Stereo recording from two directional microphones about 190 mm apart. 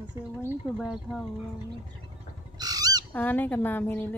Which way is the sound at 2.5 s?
20° right (ahead or behind).